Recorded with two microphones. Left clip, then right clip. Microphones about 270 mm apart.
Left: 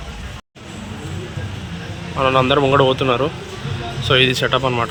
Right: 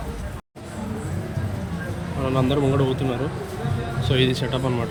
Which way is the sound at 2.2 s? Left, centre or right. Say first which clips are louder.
Left 8 dB; centre.